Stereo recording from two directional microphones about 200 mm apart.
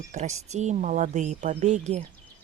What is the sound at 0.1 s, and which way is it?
Speech, 35° right (ahead or behind).